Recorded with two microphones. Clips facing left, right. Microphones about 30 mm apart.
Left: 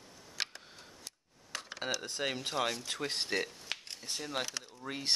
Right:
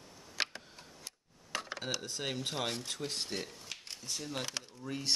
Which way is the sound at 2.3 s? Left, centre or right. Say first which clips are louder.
Left 2 dB; centre.